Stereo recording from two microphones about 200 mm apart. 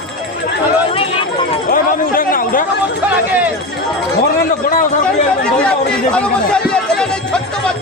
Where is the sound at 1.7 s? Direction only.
45° left (ahead or behind).